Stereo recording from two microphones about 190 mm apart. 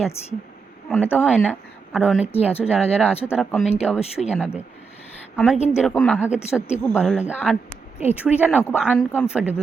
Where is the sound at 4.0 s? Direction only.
35° left (ahead or behind).